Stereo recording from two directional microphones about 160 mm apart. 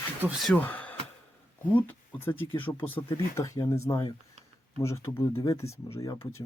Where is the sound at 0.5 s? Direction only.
10° left (ahead or behind).